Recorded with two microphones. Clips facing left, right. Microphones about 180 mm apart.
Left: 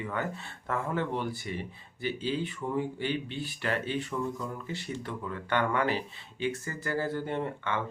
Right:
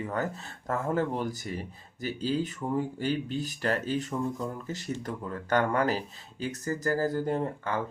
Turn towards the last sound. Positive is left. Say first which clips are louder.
# right 2 dB
turn(degrees=-40)  # may be behind; listen again after turning